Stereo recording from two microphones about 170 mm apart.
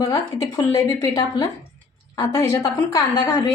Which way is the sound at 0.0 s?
20° left (ahead or behind).